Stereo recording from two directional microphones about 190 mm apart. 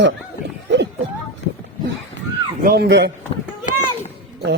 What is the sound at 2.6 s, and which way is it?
Speech, 55° right (ahead or behind).